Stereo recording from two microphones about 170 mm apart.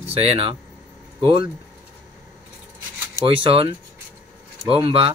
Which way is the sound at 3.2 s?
30° right (ahead or behind).